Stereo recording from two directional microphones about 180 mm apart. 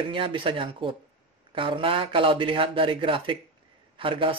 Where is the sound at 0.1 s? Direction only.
30° right (ahead or behind).